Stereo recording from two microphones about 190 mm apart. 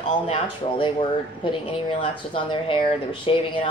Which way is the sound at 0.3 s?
25° left (ahead or behind).